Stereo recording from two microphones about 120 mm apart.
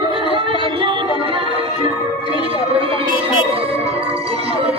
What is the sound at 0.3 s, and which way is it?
Music, 45° right (ahead or behind).